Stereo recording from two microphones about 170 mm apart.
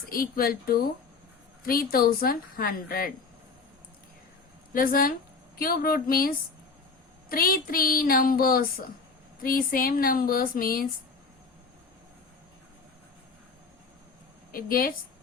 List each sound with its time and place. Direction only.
0.0 s speech: 60° left (ahead or behind)
4.7 s speech: 55° left (ahead or behind)
14.5 s speech: 60° left (ahead or behind)